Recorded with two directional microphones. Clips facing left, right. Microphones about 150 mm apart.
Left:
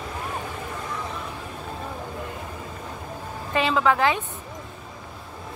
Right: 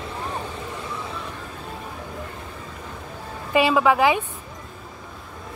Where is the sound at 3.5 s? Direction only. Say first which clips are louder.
Right 3 dB; 10° right (ahead or behind).